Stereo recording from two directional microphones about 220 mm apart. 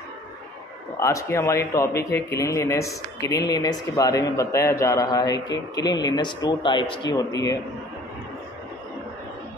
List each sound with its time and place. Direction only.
0.9 s speech: 15° left (ahead or behind)